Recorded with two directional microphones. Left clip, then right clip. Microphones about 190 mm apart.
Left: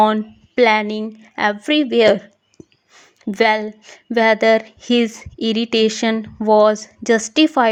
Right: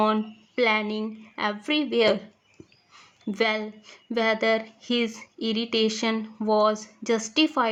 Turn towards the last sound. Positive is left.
turn(degrees=35)  # may be behind; listen again after turning